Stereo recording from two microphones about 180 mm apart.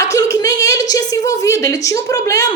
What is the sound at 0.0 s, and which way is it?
A woman's voice, 15° left (ahead or behind).